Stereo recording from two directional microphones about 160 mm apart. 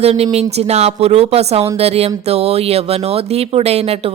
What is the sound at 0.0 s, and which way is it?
Speech, 40° right (ahead or behind).